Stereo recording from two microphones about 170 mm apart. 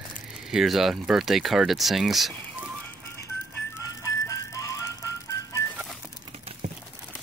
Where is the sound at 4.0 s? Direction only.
20° left (ahead or behind).